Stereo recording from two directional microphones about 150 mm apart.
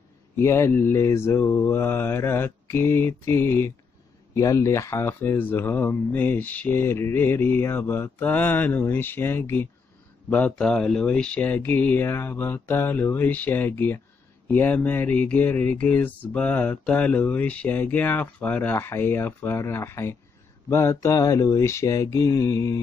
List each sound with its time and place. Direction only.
0.4 s speech: 20° left (ahead or behind)
20.7 s mantra: 20° left (ahead or behind)